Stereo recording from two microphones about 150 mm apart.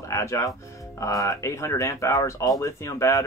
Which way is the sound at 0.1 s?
20° left (ahead or behind).